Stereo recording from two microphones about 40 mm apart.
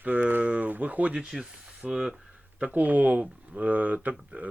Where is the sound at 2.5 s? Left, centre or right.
Right.